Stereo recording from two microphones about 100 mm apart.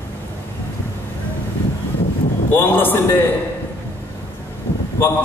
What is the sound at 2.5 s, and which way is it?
Speech, 20° left (ahead or behind).